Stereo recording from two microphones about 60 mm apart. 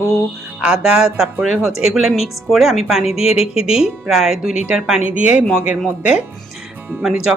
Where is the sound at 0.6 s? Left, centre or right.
Centre.